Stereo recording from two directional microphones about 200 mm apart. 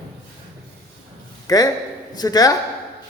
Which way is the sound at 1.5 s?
20° left (ahead or behind).